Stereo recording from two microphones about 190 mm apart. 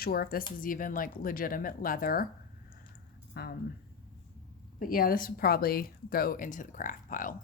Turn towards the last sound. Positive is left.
turn(degrees=45)  # may be behind; listen again after turning